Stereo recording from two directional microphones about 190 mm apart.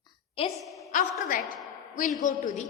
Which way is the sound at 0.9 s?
40° left (ahead or behind).